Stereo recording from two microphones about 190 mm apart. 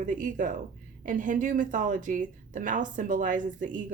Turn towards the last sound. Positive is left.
turn(degrees=-45)  # may be behind; listen again after turning